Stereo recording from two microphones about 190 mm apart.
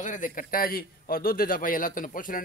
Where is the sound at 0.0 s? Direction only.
45° left (ahead or behind).